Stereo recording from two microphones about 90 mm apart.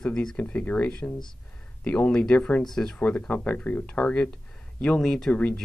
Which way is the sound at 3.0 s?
15° left (ahead or behind).